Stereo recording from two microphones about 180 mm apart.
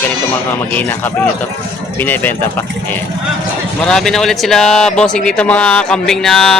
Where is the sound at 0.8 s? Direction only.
10° left (ahead or behind).